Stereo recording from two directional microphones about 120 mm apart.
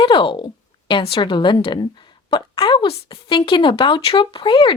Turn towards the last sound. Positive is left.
turn(degrees=45)  # may be behind; listen again after turning